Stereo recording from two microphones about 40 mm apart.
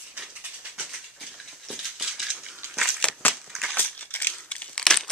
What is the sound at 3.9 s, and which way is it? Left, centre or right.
Crumpling, left.